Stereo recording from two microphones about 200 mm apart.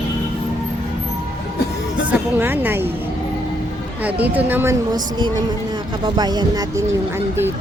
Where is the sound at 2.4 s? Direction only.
10° right (ahead or behind).